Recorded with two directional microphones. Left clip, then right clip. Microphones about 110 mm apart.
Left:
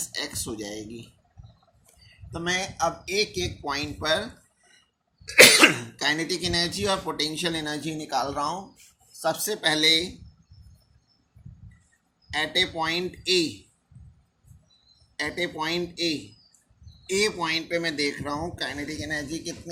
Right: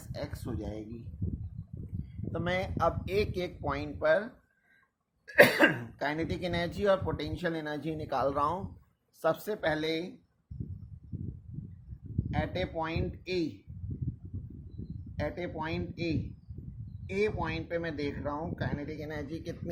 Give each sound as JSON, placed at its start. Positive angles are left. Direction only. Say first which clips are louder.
{"t": 0.1, "sound": "speech", "louder": "left 4 dB", "side_deg": -45}
{"t": 2.3, "sound": "speech", "louder": "left 5 dB", "side_deg": -55}
{"t": 3.7, "sound": "speech", "louder": "left 1 dB", "side_deg": -45}
{"t": 5.5, "sound": "speech", "louder": "left 7 dB", "side_deg": -45}
{"t": 9.6, "sound": "speech", "louder": "left 10 dB", "side_deg": -35}
{"t": 12.3, "sound": "speech", "louder": "left 10 dB", "side_deg": -30}
{"t": 15.1, "sound": "speech", "louder": "left 7 dB", "side_deg": -35}